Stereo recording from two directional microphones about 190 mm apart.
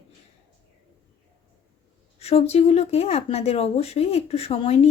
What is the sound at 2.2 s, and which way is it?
Speech, 35° left (ahead or behind).